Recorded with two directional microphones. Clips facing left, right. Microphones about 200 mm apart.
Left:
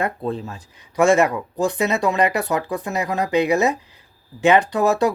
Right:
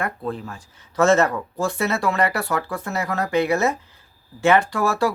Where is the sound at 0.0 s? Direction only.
25° left (ahead or behind).